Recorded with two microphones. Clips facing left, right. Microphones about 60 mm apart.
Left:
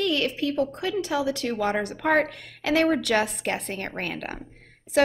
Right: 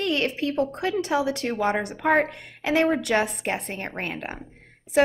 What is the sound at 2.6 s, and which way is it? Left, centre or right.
A woman's voice, right.